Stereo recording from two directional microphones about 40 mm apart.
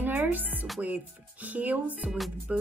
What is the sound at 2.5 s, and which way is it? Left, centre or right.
Music, right.